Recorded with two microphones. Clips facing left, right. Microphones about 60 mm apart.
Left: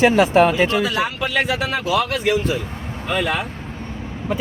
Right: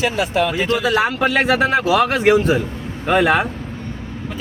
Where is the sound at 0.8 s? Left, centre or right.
Right.